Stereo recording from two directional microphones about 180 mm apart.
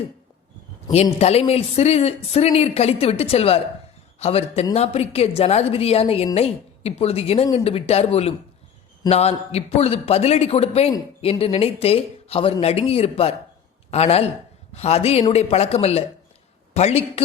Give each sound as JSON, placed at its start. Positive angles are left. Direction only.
{"t": 1.2, "sound": "a woman's voice", "side_deg": 35}